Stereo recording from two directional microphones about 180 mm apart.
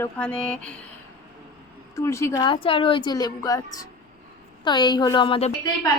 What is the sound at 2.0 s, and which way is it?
A woman's voice, 15° left (ahead or behind).